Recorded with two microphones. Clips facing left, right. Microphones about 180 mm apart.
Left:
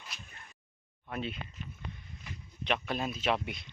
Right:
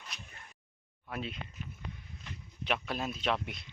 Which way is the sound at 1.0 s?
Centre (ahead or behind).